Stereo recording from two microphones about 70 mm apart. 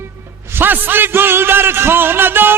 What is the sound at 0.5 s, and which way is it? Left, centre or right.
A man's voice, right.